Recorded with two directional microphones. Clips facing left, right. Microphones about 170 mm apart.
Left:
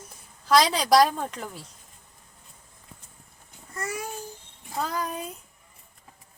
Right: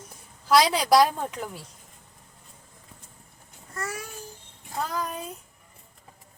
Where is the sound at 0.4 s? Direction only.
5° right (ahead or behind).